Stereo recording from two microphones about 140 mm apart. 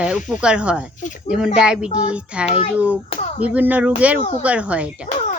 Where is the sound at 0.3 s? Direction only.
5° right (ahead or behind).